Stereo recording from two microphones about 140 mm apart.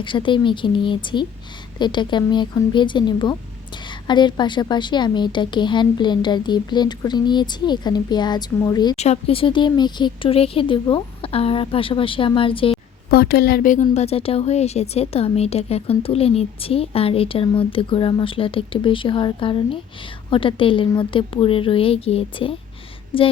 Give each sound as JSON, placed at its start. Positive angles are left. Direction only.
{"t": 0.0, "sound": "a woman's voice", "side_deg": 35}
{"t": 9.0, "sound": "a woman's voice", "side_deg": 45}
{"t": 13.1, "sound": "a woman's voice", "side_deg": 90}
{"t": 13.9, "sound": "a woman's voice", "side_deg": 50}